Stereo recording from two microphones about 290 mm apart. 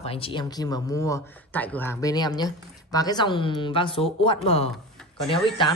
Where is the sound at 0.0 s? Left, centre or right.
Centre.